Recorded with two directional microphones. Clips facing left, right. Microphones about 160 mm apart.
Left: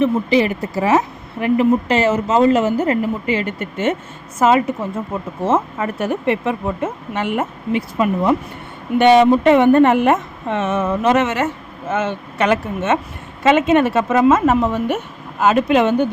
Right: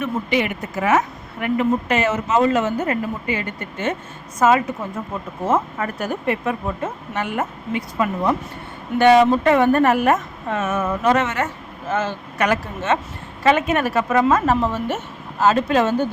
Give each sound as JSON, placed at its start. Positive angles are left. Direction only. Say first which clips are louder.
{"t": 0.0, "sound": "speech", "louder": "left 6 dB", "side_deg": 35}
{"t": 5.8, "sound": "a woman's voice", "louder": "left 4 dB", "side_deg": 25}